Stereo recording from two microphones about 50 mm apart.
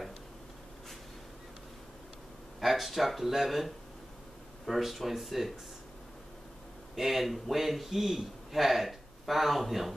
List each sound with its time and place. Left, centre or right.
2.6 s a man's voice: centre
7.0 s a man's voice: centre